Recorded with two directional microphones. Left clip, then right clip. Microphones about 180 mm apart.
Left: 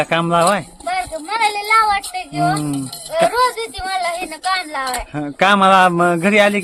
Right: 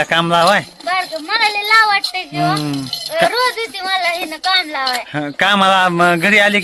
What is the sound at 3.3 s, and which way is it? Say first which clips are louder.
Speech: even; 25° left (ahead or behind).